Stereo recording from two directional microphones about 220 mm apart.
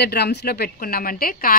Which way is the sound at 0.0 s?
50° left (ahead or behind).